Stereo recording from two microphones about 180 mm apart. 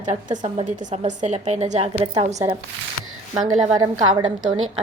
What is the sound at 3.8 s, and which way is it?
Speech, 25° right (ahead or behind).